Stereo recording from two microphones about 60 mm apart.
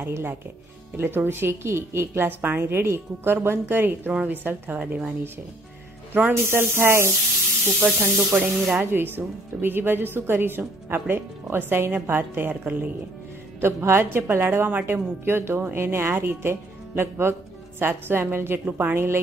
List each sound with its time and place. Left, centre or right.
0.0 s speech: right
4.1 s a woman's voice: right
6.1 s speech: right
8.3 s speech: right
13.6 s speech: right